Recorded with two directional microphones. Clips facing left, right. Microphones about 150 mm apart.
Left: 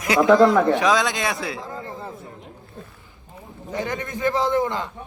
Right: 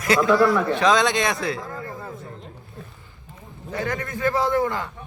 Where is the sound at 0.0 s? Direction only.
20° left (ahead or behind).